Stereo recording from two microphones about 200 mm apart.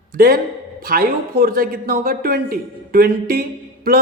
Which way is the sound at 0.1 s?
45° right (ahead or behind).